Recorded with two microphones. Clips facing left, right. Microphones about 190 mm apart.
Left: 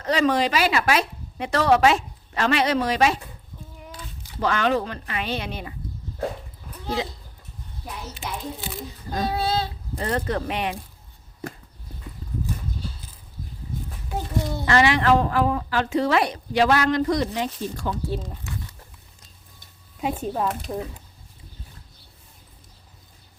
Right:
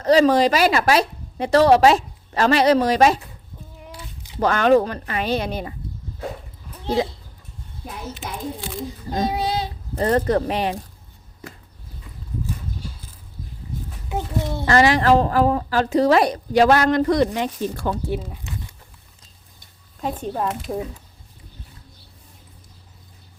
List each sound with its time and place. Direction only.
0.0 s a woman's voice: 35° right (ahead or behind)
3.9 s a sound: 15° right (ahead or behind)
4.4 s speech: 45° right (ahead or behind)
6.8 s speech: 35° right (ahead or behind)
8.5 s a sound: centre (ahead or behind)
9.0 s speech: 20° right (ahead or behind)
10.0 s a woman's voice: 40° right (ahead or behind)
14.1 s a child's voice: 25° right (ahead or behind)
14.7 s a woman's voice: 40° right (ahead or behind); by 17.9 s 60° right (ahead or behind)
18.1 s speech: 10° right (ahead or behind)
20.0 s speech: 5° left (ahead or behind)
20.7 s speech: 10° right (ahead or behind)